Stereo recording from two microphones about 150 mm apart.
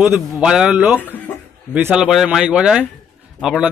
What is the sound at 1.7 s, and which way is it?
A man's voice, 10° right (ahead or behind).